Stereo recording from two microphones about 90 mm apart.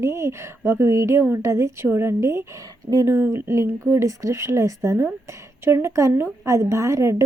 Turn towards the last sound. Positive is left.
turn(degrees=-35)  # may be behind; listen again after turning